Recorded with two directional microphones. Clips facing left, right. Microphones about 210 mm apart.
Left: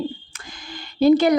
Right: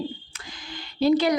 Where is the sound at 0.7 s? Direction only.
50° left (ahead or behind).